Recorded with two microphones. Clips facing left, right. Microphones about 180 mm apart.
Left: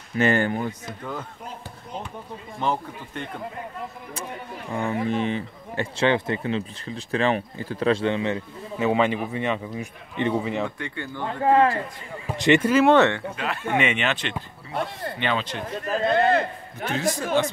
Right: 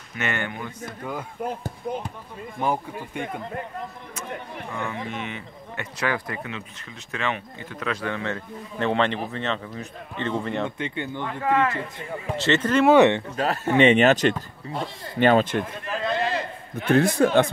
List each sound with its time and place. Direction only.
0.1 s speech: 35° left (ahead or behind)
1.4 s speech: 55° right (ahead or behind)
2.6 s speech: 10° right (ahead or behind)
5.0 s speech: 35° left (ahead or behind)
8.7 s speech: 5° left (ahead or behind)
10.8 s speech: 20° right (ahead or behind)
11.2 s speech: 30° left (ahead or behind)
12.4 s speech: 15° left (ahead or behind)
12.8 s speech: 15° right (ahead or behind)
13.4 s speech: 40° right (ahead or behind)
14.8 s speech: 60° left (ahead or behind)
15.1 s speech: 45° right (ahead or behind)
15.8 s speech: 50° left (ahead or behind)
16.7 s a man's voice: 55° right (ahead or behind)